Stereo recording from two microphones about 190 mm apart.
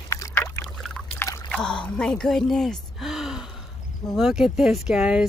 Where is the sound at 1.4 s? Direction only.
5° left (ahead or behind).